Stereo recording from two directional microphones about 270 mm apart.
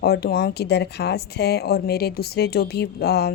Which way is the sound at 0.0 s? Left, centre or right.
Left.